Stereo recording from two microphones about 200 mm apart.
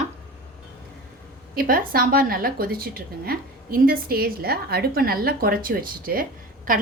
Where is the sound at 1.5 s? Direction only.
45° right (ahead or behind).